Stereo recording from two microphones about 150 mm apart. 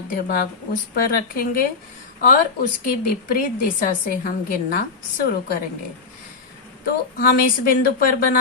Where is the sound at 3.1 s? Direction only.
70° left (ahead or behind).